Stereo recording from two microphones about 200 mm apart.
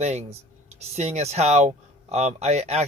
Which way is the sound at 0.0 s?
35° right (ahead or behind).